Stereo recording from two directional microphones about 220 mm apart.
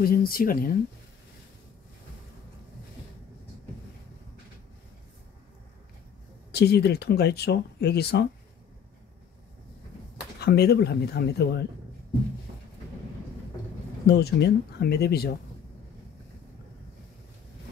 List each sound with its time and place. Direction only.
0.0 s speech: 40° left (ahead or behind)
6.5 s speech: 45° left (ahead or behind)
10.4 s speech: 50° left (ahead or behind)
14.0 s speech: 45° left (ahead or behind)